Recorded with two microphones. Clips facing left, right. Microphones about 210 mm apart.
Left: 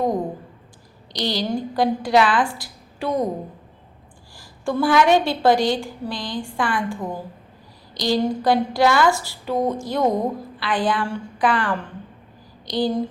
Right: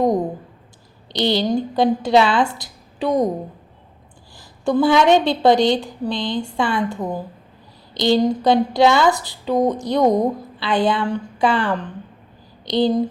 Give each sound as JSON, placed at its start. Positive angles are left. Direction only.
{"t": 1.1, "sound": "a woman's voice", "side_deg": -25}
{"t": 4.4, "sound": "a woman's voice", "side_deg": -20}